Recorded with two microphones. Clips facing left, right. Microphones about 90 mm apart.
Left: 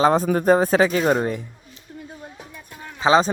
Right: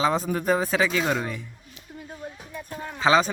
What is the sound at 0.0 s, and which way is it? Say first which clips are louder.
Speech: left 6 dB; 50° left (ahead or behind).